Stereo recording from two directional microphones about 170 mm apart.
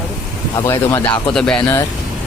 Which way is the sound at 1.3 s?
5° left (ahead or behind).